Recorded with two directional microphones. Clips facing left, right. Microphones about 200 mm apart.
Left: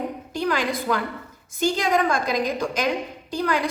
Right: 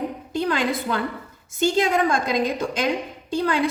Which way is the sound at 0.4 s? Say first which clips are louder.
Left 1 dB; 25° right (ahead or behind).